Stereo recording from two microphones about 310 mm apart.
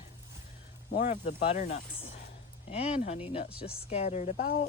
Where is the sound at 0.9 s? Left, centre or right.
Left.